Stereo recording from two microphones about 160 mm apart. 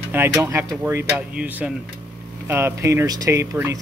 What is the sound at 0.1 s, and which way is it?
Speech, 15° right (ahead or behind).